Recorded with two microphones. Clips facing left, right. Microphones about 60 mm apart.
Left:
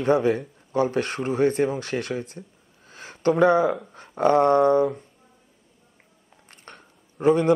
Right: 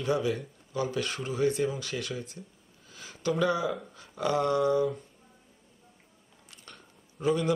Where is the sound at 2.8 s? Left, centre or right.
Left.